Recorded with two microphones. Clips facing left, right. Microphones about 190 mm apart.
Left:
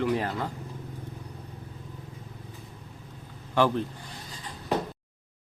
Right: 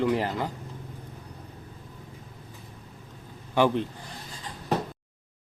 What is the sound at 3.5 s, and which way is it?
Speech, 15° right (ahead or behind).